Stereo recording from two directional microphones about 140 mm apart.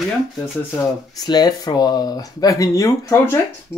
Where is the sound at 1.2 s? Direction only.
30° left (ahead or behind).